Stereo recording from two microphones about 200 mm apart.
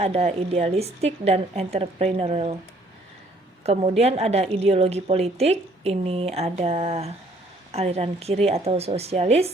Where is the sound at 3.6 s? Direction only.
30° right (ahead or behind).